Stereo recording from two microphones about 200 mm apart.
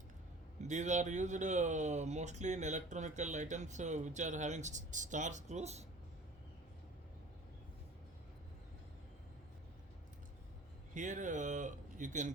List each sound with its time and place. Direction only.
0.7 s speech: 35° right (ahead or behind)
10.9 s speech: 40° right (ahead or behind)